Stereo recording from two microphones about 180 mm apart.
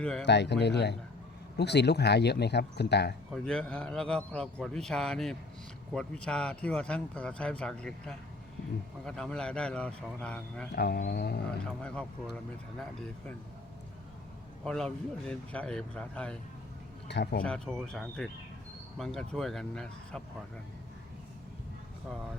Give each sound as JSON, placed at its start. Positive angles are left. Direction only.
{"t": 0.0, "sound": "speech", "side_deg": 5}
{"t": 0.3, "sound": "speech", "side_deg": 70}
{"t": 3.3, "sound": "speech", "side_deg": 5}
{"t": 10.7, "sound": "speech", "side_deg": 65}
{"t": 11.8, "sound": "speech", "side_deg": 5}
{"t": 14.6, "sound": "speech", "side_deg": 5}
{"t": 17.1, "sound": "speech", "side_deg": 65}
{"t": 17.4, "sound": "speech", "side_deg": 5}